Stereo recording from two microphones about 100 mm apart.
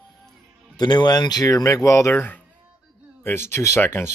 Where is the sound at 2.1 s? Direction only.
20° left (ahead or behind).